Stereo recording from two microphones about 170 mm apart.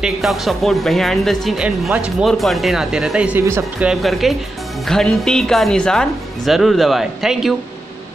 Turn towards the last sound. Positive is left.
turn(degrees=0)  # may be behind; listen again after turning